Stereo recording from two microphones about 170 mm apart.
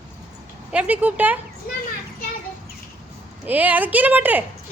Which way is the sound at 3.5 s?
10° right (ahead or behind).